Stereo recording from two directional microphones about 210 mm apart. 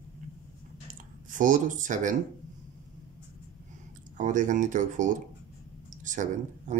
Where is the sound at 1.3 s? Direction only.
40° right (ahead or behind).